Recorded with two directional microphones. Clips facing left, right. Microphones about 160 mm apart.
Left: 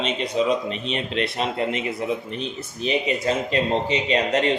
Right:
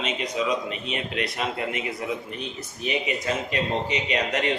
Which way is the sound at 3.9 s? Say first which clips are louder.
Left 5 dB; 30° left (ahead or behind).